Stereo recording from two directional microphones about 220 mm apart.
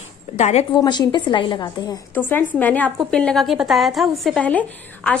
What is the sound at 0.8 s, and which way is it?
A woman's voice, 20° left (ahead or behind).